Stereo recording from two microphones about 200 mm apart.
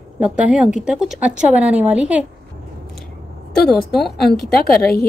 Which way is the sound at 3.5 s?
Centre (ahead or behind).